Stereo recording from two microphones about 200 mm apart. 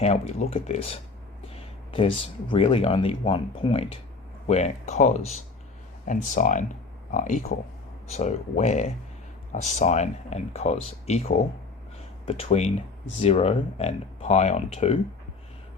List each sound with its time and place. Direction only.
0.0 s speech: 35° left (ahead or behind)